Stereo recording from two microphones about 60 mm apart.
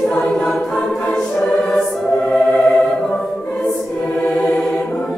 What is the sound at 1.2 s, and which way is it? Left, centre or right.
Music, centre.